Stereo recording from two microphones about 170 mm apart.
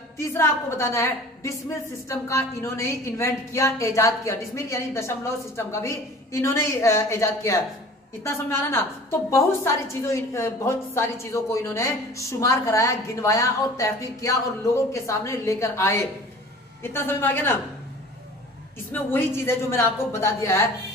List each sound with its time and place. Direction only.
0.2 s a woman's voice: 15° left (ahead or behind)
18.9 s a woman's voice: 10° left (ahead or behind)